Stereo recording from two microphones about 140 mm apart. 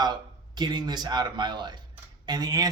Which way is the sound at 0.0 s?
30° right (ahead or behind).